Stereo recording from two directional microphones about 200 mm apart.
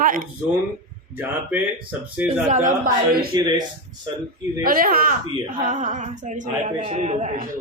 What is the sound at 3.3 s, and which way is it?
Speech, 20° right (ahead or behind).